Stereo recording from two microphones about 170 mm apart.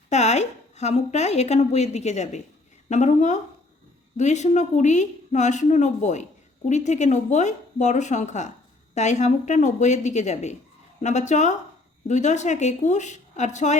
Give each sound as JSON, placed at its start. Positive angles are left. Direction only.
{"t": 0.1, "sound": "a woman's voice", "side_deg": 40}